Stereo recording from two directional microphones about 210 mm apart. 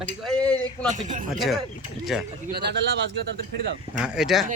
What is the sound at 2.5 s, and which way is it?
A man's voice, 50° right (ahead or behind).